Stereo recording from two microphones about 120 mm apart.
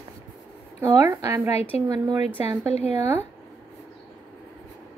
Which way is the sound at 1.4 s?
60° left (ahead or behind).